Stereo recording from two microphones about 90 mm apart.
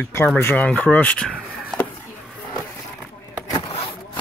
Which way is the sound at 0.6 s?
15° left (ahead or behind).